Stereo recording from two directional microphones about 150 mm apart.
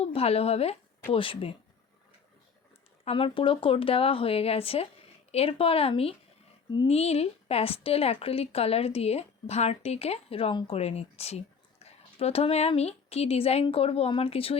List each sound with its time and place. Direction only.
0.0 s speech: 40° left (ahead or behind)
3.0 s speech: 35° left (ahead or behind)